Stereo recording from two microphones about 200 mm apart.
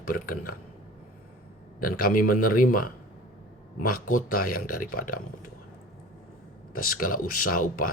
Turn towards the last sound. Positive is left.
turn(degrees=45)  # may be behind; listen again after turning